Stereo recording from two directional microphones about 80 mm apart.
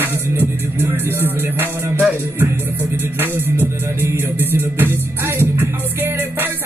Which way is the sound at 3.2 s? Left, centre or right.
Right.